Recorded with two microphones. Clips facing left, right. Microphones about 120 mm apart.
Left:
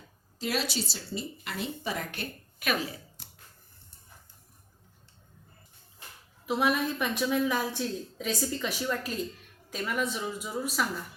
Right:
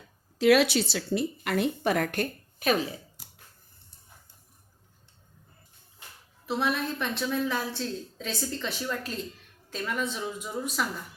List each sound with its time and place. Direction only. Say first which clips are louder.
0.3 s a woman's voice: right 11 dB; 65° right (ahead or behind)
2.6 s speech: right 5 dB; 30° right (ahead or behind)
6.4 s a woman's voice: left 1 dB; 10° left (ahead or behind)